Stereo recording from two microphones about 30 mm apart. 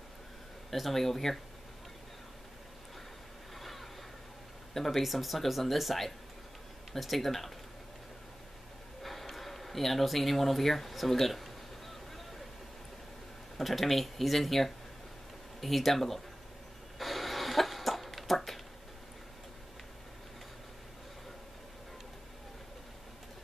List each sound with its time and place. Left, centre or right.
0.7 s speech: centre
3.5 s a sound: centre
4.7 s speech: centre
9.0 s speech: centre
13.6 s speech: centre
17.0 s cough: centre